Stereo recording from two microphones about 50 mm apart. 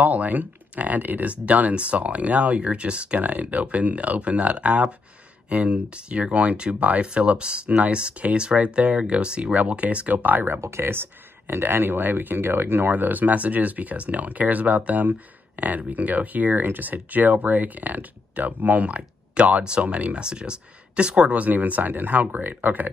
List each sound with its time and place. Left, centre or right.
0.0 s speech: right